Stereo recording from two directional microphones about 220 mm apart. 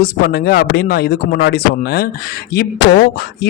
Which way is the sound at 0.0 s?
45° left (ahead or behind).